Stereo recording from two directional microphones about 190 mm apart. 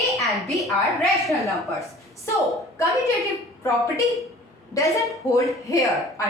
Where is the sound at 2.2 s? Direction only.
15° left (ahead or behind).